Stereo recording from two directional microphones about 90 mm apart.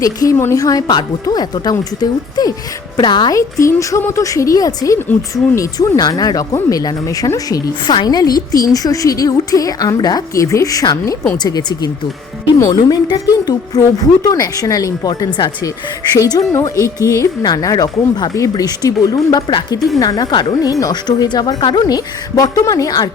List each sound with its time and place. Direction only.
0.0 s a woman's voice: 40° left (ahead or behind)
0.6 s speech: 45° left (ahead or behind)
3.3 s a woman's voice: 35° left (ahead or behind)
6.0 s a woman's voice: 45° left (ahead or behind)
20.7 s speech: 40° left (ahead or behind)